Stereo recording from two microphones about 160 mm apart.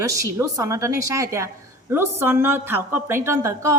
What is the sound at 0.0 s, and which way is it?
A woman's voice, 20° right (ahead or behind).